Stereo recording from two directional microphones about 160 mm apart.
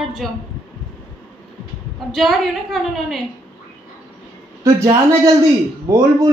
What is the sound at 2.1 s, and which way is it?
A woman's voice, centre (ahead or behind).